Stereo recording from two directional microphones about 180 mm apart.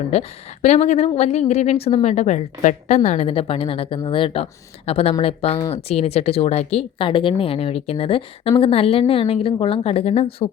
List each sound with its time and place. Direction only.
0.1 s a woman's voice: 35° left (ahead or behind)